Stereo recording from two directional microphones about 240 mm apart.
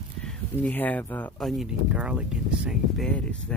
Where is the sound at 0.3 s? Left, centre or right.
Centre.